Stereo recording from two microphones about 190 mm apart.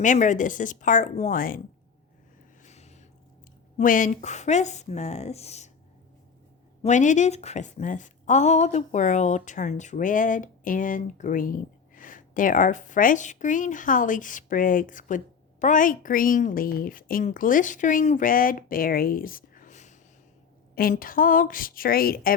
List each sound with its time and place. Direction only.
0.0 s speech: 40° left (ahead or behind)
2.6 s a sound: 35° left (ahead or behind)
3.8 s speech: 45° left (ahead or behind)
6.8 s a woman's voice: 40° left (ahead or behind)